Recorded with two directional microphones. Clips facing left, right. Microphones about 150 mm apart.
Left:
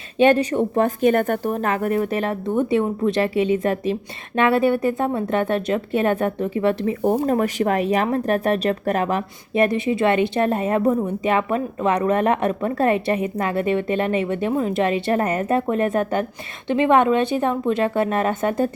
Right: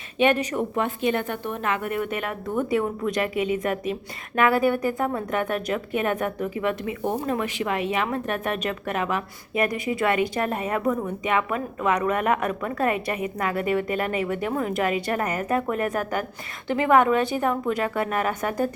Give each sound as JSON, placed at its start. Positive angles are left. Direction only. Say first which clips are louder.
{"t": 0.2, "sound": "a woman's voice", "louder": "left 5 dB", "side_deg": 30}